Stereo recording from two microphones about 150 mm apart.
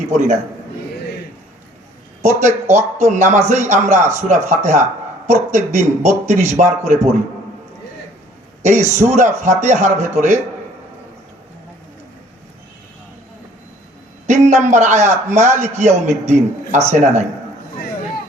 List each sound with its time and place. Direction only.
0.1 s a man's voice: 50° right (ahead or behind)
2.2 s a man's voice: 55° right (ahead or behind)
9.0 s a man's voice: 50° right (ahead or behind)
14.3 s a man's voice: 50° right (ahead or behind)